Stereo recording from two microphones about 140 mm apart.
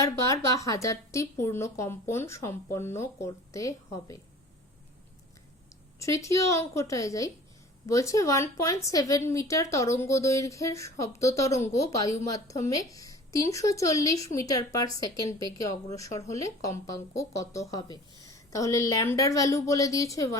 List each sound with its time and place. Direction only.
0.0 s a woman's voice: 20° left (ahead or behind)
6.0 s a woman's voice: 20° left (ahead or behind)